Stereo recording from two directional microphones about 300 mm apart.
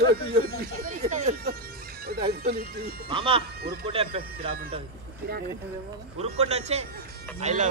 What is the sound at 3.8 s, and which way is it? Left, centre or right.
Speech, centre.